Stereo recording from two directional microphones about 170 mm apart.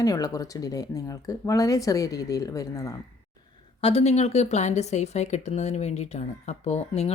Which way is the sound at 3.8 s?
35° left (ahead or behind).